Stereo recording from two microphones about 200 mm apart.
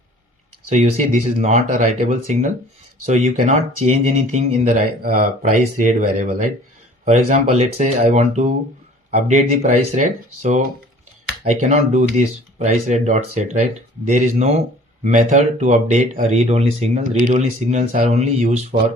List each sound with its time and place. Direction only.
0.7 s speech: 35° right (ahead or behind)